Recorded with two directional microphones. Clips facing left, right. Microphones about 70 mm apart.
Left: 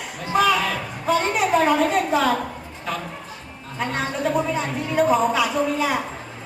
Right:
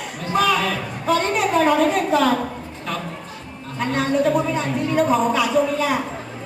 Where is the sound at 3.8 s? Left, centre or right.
Centre.